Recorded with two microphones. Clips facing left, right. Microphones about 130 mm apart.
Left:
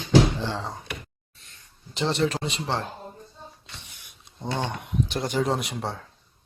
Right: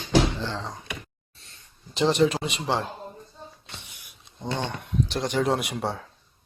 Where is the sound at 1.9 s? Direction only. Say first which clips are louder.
Right 4 dB; 15° right (ahead or behind).